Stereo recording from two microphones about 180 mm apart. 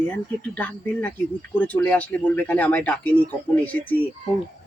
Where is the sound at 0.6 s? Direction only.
10° left (ahead or behind).